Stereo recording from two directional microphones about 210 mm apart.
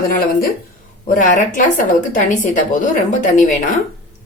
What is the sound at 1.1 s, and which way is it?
A woman's voice, 40° left (ahead or behind).